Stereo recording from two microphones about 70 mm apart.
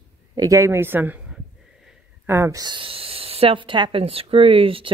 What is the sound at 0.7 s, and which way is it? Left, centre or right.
Speech, right.